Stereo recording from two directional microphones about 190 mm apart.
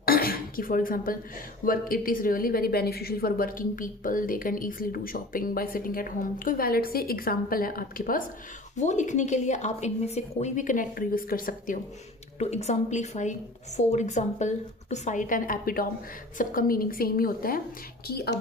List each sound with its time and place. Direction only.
0.0 s a sound: 50° left (ahead or behind)
1.6 s a woman's voice: 50° left (ahead or behind)
12.4 s a woman's voice: 35° left (ahead or behind); by 18.3 s 55° left (ahead or behind)